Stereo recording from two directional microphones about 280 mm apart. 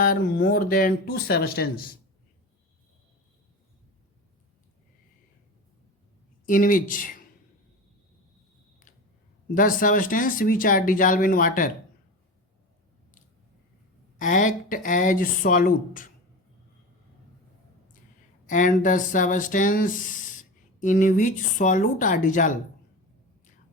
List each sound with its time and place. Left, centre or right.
0.0 s speech: left
6.4 s speech: left
9.6 s speech: left
14.2 s speech: left
18.4 s speech: left